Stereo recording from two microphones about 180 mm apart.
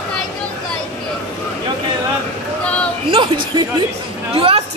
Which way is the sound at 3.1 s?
25° right (ahead or behind).